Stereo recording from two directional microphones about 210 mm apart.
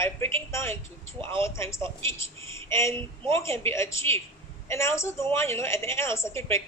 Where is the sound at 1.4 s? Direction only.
10° left (ahead or behind).